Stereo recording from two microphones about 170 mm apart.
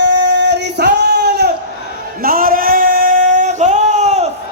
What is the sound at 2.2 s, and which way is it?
Singing, 55° right (ahead or behind).